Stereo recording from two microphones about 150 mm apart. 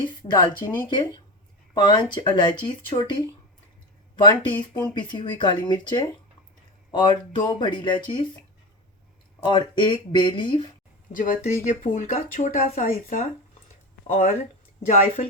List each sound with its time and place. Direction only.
0.0 s speech: 30° left (ahead or behind)
9.4 s speech: 30° left (ahead or behind)
11.1 s speech: 65° left (ahead or behind)
14.8 s a woman's voice: 45° left (ahead or behind)